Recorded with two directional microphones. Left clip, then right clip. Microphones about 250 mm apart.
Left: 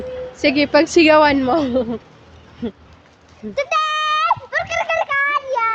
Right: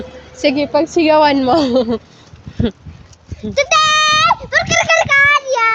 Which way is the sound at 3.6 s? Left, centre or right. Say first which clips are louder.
Right 7 dB; right.